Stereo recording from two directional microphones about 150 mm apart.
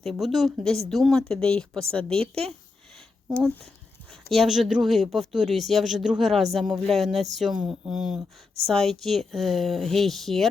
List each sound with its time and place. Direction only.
0.0 s speech: centre (ahead or behind)
2.2 s speech: 40° right (ahead or behind)
4.1 s speech: centre (ahead or behind)